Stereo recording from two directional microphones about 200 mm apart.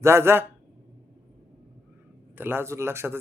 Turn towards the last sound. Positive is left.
turn(degrees=-10)  # may be behind; listen again after turning